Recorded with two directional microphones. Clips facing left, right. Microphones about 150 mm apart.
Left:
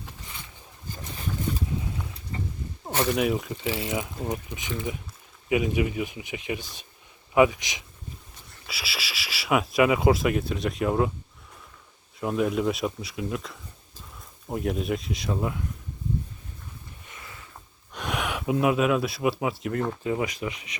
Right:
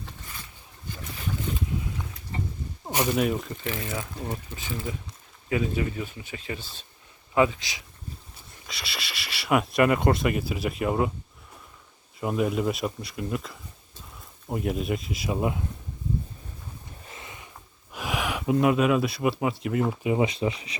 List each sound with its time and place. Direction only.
0.0 s a sound: 20° left (ahead or behind)
2.9 s speech: 15° right (ahead or behind)
3.2 s speech: 5° left (ahead or behind)
3.8 s speech: 15° left (ahead or behind)
8.6 s speech: 5° left (ahead or behind)
12.2 s speech: centre (ahead or behind)
15.4 s speech: 20° right (ahead or behind)
17.1 s sniff: 25° right (ahead or behind)
17.9 s speech: 5° right (ahead or behind)
20.1 s speech: 25° right (ahead or behind)